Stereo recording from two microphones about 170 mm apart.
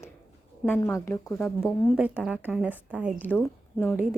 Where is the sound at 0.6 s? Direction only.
15° left (ahead or behind).